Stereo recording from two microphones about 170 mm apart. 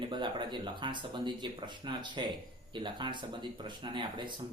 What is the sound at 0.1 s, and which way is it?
Speech, 25° right (ahead or behind).